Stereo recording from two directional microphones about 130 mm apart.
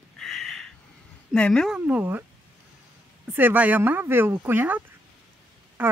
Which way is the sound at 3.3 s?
15° right (ahead or behind).